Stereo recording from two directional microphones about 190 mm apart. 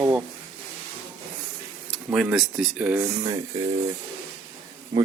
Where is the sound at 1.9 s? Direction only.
Centre (ahead or behind).